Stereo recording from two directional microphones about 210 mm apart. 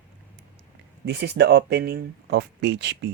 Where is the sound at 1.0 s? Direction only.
50° right (ahead or behind).